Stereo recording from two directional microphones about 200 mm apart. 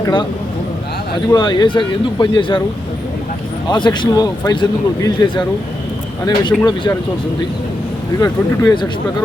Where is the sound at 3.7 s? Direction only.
25° left (ahead or behind).